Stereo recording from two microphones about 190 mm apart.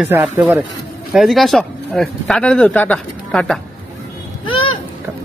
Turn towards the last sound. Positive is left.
turn(degrees=25)  # may be behind; listen again after turning